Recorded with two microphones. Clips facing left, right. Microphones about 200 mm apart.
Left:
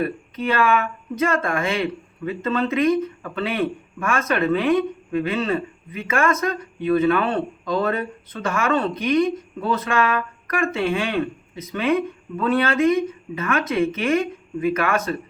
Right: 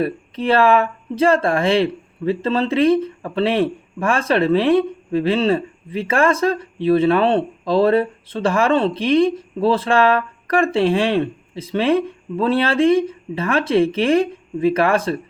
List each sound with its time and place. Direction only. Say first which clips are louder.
0.0 s speech: right 3 dB; 30° right (ahead or behind)